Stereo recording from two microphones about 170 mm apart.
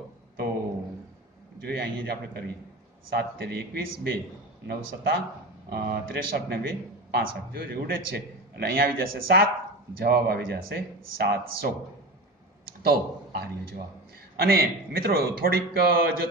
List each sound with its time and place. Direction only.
1.6 s a man's voice: 65° right (ahead or behind)
12.8 s a man's voice: 65° right (ahead or behind)